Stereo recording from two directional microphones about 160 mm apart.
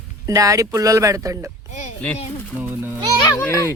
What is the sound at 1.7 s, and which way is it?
Speech, 50° left (ahead or behind).